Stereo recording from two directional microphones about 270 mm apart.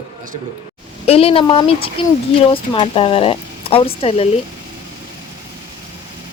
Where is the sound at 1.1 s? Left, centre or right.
Left.